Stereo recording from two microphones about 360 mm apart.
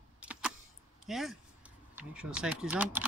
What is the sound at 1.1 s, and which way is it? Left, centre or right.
Speech, centre.